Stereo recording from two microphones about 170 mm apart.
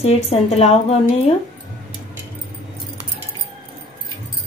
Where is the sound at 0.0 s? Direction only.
40° left (ahead or behind).